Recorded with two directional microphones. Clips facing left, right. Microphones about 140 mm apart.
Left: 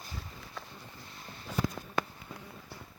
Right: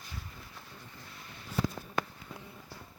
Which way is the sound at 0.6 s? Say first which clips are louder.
Left 6 dB; 90° left.